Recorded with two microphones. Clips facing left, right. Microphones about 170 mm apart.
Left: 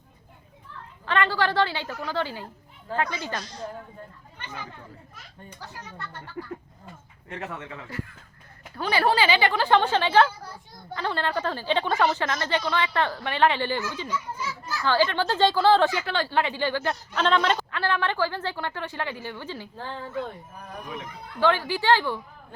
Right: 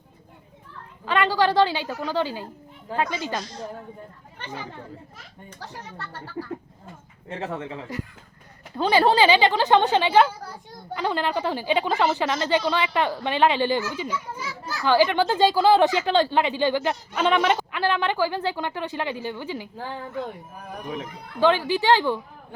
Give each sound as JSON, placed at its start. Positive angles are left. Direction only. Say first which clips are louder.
{"t": 1.0, "sound": "speech", "louder": "right 3 dB", "side_deg": -15}
{"t": 7.3, "sound": "a woman's voice", "louder": "right 5 dB", "side_deg": -30}
{"t": 21.4, "sound": "speech", "louder": "right 3 dB", "side_deg": -15}